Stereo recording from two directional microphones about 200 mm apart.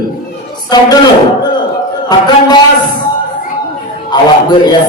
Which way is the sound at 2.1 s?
20° left (ahead or behind).